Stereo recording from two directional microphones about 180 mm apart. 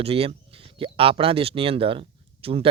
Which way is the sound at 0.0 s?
35° right (ahead or behind).